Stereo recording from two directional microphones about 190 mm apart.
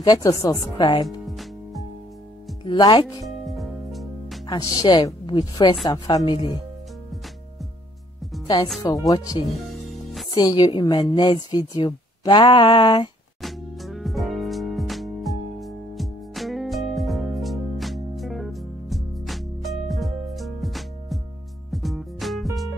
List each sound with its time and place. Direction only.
0.0 s a woman's voice: 20° left (ahead or behind)
1.2 s music: centre (ahead or behind)
2.6 s speech: 25° left (ahead or behind)
3.3 s music: centre (ahead or behind)
4.5 s a woman's voice: 20° left (ahead or behind)
8.8 s a woman's voice: 20° left (ahead or behind)
9.7 s music: centre (ahead or behind)
10.3 s a woman's voice: 20° left (ahead or behind)
13.4 s music: centre (ahead or behind)